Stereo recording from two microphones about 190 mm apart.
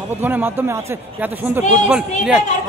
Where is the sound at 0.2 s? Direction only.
10° right (ahead or behind).